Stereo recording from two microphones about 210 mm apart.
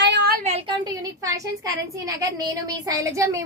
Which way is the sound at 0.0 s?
55° right (ahead or behind).